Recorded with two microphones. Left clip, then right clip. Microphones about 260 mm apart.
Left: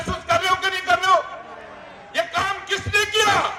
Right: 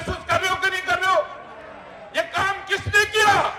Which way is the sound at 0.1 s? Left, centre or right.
Centre.